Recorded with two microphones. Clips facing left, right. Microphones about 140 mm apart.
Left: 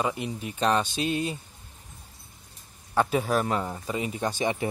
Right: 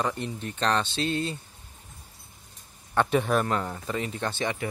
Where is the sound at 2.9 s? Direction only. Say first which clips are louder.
Right 1 dB; 5° left (ahead or behind).